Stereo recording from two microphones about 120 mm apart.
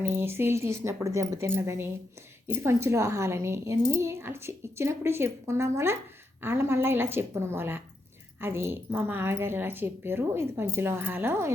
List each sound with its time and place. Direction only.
0.0 s speech: 20° right (ahead or behind)